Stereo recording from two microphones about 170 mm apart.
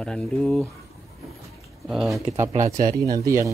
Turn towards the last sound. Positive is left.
turn(degrees=-20)  # may be behind; listen again after turning